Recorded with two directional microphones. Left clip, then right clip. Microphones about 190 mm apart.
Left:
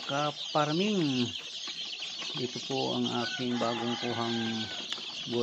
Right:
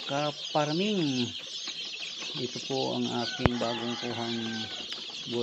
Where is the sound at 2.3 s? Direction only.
5° left (ahead or behind).